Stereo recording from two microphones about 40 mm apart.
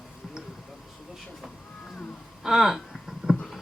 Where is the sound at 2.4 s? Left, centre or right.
Centre.